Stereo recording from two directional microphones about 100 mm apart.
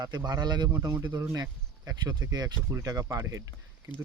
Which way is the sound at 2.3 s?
40° right (ahead or behind).